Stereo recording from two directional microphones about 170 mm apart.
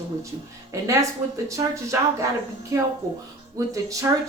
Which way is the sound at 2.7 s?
20° right (ahead or behind).